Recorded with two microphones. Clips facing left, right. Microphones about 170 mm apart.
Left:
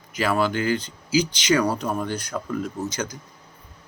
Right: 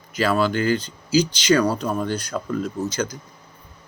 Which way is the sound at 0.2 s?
20° left (ahead or behind).